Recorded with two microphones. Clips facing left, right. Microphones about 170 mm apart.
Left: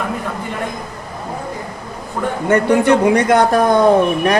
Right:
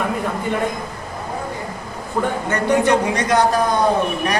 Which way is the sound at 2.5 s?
55° left (ahead or behind).